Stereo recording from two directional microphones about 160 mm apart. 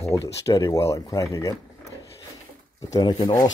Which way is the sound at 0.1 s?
15° left (ahead or behind).